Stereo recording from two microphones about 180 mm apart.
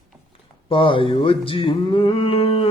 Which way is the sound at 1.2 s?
30° left (ahead or behind).